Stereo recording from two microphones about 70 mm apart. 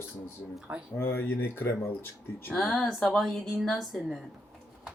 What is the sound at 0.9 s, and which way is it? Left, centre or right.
Speech, left.